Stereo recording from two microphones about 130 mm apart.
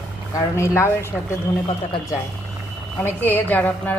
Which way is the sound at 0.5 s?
20° left (ahead or behind).